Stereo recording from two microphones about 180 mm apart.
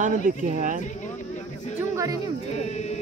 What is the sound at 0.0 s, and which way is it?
Speech, 45° right (ahead or behind).